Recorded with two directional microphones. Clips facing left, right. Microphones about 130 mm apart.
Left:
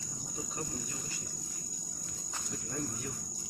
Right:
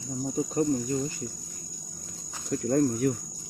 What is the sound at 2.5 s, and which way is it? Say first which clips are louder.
Speech: right 16 dB; 65° right (ahead or behind).